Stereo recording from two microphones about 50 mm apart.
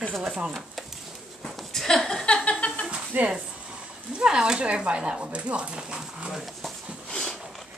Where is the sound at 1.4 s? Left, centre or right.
Centre.